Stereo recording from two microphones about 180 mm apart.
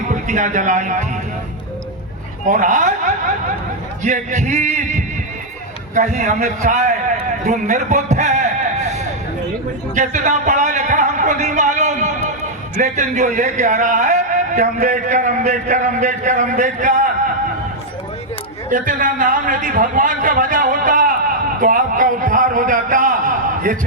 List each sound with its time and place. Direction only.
0.1 s speech: 45° right (ahead or behind)
2.4 s a man's voice: 45° right (ahead or behind)
9.9 s a man's voice: 45° right (ahead or behind)
18.7 s a man's voice: 45° right (ahead or behind)